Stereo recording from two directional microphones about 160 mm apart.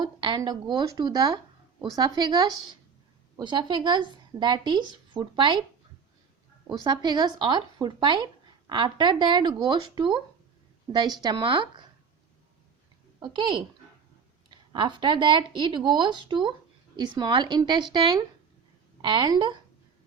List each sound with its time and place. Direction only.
0.0 s a woman's voice: 25° right (ahead or behind)
6.7 s a woman's voice: 25° right (ahead or behind)
13.1 s a woman's voice: 30° right (ahead or behind)